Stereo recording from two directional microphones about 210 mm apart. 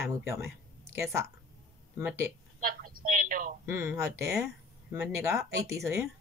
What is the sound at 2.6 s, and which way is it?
Telephone, 40° right (ahead or behind).